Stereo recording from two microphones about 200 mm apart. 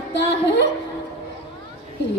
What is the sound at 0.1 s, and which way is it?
Speech, 60° left (ahead or behind).